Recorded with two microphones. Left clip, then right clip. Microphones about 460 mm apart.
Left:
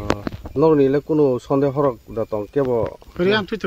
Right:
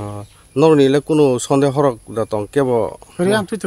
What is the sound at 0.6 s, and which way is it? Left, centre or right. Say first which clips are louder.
Speech: right 3 dB; left.